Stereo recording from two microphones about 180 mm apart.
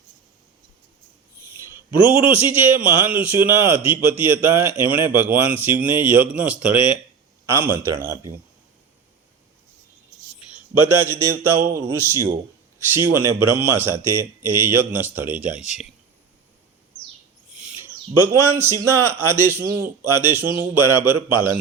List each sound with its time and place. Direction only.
2.1 s a man's voice: 10° right (ahead or behind)
10.8 s a man's voice: 15° right (ahead or behind)
17.5 s a man's voice: 5° right (ahead or behind)